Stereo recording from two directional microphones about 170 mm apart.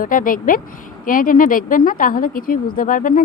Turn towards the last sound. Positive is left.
turn(degrees=55)  # may be behind; listen again after turning